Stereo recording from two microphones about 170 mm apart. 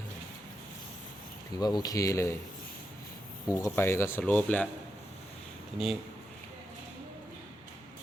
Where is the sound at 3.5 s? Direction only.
15° left (ahead or behind).